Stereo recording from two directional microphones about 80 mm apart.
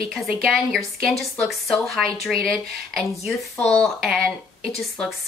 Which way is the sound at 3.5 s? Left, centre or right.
Centre.